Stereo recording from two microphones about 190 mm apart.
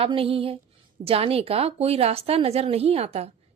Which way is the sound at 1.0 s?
30° right (ahead or behind).